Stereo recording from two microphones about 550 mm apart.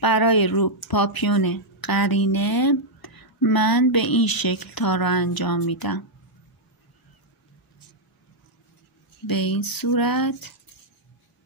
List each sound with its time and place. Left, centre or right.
0.0 s a woman's voice: left
9.2 s a woman's voice: left